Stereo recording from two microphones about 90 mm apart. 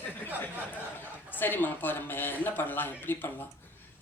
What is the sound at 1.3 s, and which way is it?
A woman's voice, 20° left (ahead or behind).